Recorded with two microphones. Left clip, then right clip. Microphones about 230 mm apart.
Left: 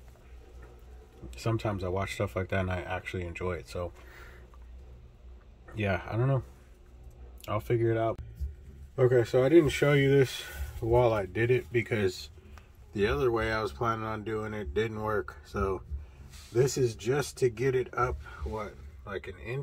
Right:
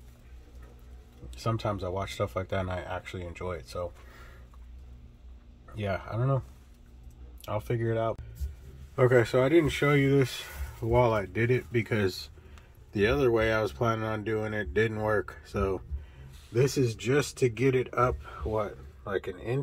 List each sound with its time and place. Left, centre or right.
1.3 s speech: centre
5.8 s speech: centre
7.4 s speech: centre
15.5 s speech: right
16.5 s speech: centre